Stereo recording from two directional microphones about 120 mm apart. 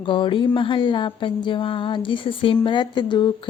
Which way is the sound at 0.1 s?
45° left (ahead or behind).